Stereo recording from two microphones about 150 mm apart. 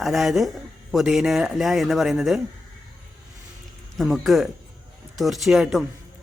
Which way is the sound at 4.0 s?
Centre (ahead or behind).